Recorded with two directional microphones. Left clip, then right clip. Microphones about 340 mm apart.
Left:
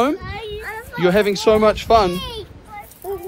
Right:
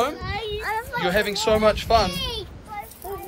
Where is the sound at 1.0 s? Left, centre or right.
Centre.